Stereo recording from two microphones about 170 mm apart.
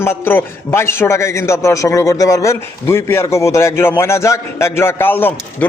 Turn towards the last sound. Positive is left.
turn(degrees=10)  # may be behind; listen again after turning